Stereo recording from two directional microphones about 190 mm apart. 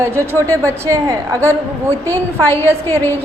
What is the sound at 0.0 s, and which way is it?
A woman's voice, 15° right (ahead or behind).